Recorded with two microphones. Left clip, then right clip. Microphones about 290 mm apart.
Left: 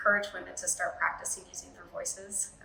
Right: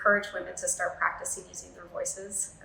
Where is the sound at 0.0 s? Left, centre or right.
Centre.